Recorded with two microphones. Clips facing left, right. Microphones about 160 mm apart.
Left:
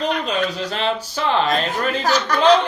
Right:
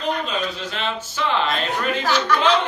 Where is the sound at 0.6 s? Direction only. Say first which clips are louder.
Left 5 dB; 35° left (ahead or behind).